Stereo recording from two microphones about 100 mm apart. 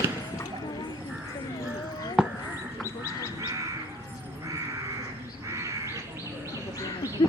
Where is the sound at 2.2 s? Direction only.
5° right (ahead or behind).